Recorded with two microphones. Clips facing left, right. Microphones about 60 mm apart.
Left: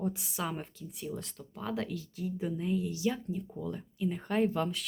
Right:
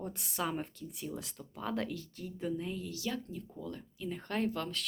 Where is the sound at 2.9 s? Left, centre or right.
Centre.